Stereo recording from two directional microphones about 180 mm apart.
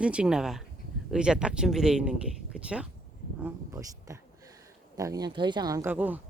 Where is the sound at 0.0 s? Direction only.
5° right (ahead or behind).